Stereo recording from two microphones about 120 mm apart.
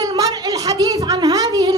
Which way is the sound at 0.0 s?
30° right (ahead or behind).